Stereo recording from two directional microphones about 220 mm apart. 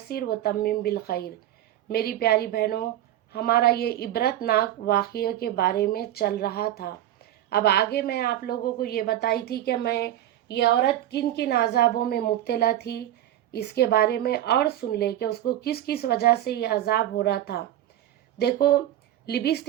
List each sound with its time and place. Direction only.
0.1 s speech: 45° left (ahead or behind)